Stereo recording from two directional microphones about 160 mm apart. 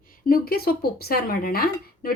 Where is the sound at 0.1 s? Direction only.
65° left (ahead or behind).